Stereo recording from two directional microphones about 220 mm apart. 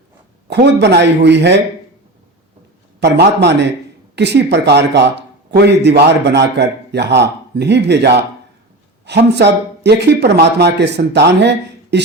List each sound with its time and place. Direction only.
0.5 s speech: 50° right (ahead or behind)
3.0 s speech: 50° right (ahead or behind)